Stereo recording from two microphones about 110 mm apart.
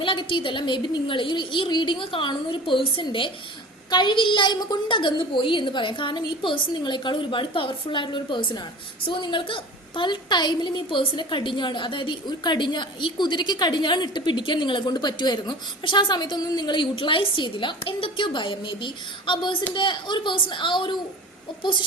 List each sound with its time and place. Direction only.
0.0 s a woman's voice: 50° left (ahead or behind)